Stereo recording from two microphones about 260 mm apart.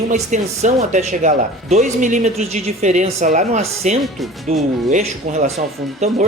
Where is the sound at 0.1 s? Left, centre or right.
Right.